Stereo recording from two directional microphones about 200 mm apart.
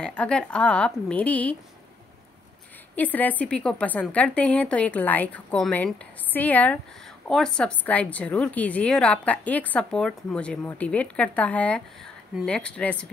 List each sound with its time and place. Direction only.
0.0 s a woman's voice: 5° left (ahead or behind)
3.0 s a woman's voice: 10° left (ahead or behind)